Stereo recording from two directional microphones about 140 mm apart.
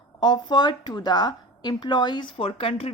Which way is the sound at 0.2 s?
30° left (ahead or behind).